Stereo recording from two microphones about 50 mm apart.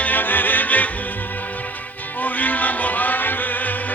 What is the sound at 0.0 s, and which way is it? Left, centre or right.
Music, left.